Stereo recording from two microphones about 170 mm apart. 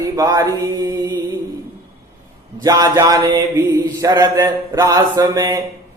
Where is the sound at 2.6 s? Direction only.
20° right (ahead or behind).